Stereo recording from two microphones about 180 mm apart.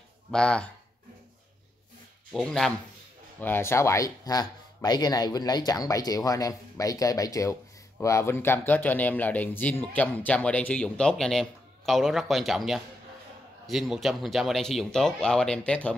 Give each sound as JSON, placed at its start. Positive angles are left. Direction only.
{"t": 0.3, "sound": "speech", "side_deg": 5}
{"t": 2.3, "sound": "a man's voice", "side_deg": 0}